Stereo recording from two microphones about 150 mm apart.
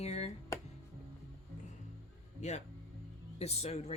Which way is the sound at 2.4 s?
50° left (ahead or behind).